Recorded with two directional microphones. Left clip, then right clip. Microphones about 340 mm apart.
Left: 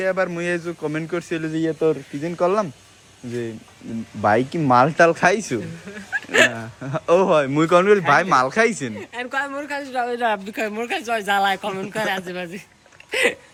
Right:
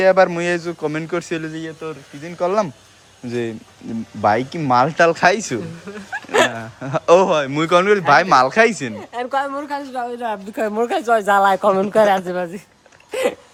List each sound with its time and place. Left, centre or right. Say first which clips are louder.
0.0 s a man's voice: right 8 dB; centre
2.4 s a man's voice: right 2 dB; centre
5.9 s speech: right 1 dB; right
6.5 s a man's voice: right 4 dB; centre
9.0 s speech: right 4 dB; centre
13.1 s hiccup: left 1 dB; centre